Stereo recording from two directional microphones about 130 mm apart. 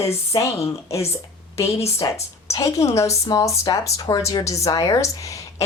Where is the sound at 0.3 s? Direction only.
25° left (ahead or behind).